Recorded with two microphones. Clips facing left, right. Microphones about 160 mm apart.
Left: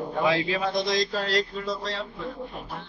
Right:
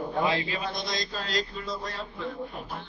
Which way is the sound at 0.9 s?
75° left (ahead or behind).